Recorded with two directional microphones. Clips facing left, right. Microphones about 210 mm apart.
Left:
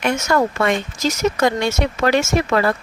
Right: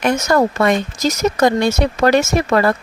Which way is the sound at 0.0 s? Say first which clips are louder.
Right 3 dB; 35° right (ahead or behind).